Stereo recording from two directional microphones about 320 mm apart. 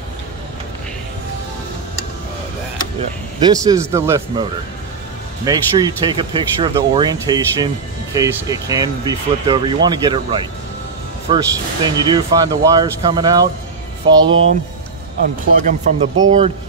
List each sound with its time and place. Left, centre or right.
3.0 s speech: centre
15.2 s speech: right